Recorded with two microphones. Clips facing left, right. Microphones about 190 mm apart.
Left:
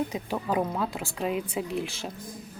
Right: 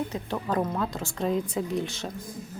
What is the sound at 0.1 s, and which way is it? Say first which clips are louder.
A woman's voice: even; 10° left (ahead or behind).